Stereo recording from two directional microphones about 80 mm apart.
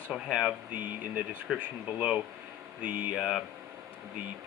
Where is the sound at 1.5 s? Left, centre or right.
Centre.